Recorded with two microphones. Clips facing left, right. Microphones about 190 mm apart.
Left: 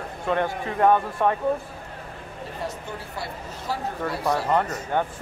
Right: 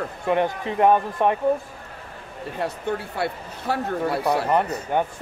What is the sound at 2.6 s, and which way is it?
Speech, 65° right (ahead or behind).